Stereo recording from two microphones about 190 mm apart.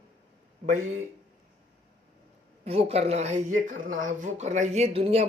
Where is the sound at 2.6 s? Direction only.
30° right (ahead or behind).